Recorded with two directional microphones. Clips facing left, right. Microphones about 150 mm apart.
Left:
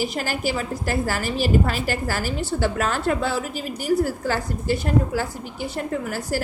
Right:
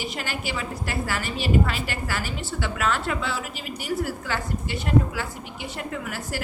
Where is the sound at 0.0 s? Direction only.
40° left (ahead or behind).